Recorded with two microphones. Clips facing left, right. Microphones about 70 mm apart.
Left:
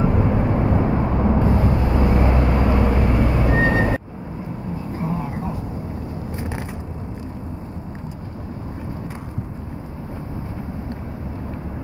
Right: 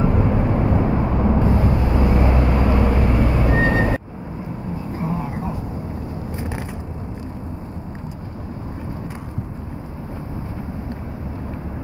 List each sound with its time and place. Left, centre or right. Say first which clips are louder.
0.0 s vehicle: even; centre
1.4 s vehicle: even; centre
2.0 s vehicle: even; left
2.3 s vehicle: even; centre
4.9 s a sound: even; centre